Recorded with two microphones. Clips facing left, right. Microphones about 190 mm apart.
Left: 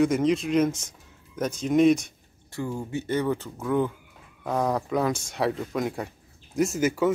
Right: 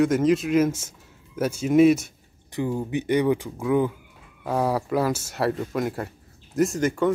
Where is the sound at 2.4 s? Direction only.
15° right (ahead or behind).